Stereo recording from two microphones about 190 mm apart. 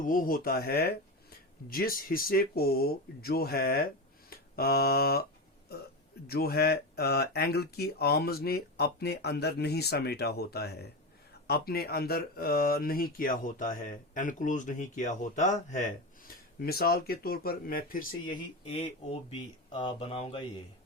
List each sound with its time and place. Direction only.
0.0 s speech: 45° left (ahead or behind)
6.2 s speech: 55° left (ahead or behind)
18.3 s speech: 30° left (ahead or behind)